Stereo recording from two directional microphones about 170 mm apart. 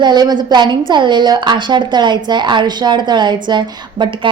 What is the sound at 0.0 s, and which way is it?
A woman's voice, 25° right (ahead or behind).